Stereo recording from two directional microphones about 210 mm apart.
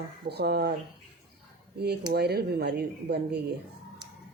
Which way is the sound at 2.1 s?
50° right (ahead or behind).